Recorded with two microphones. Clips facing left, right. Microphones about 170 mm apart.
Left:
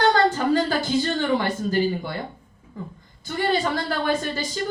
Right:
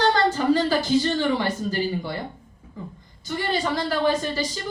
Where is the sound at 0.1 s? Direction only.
50° left (ahead or behind).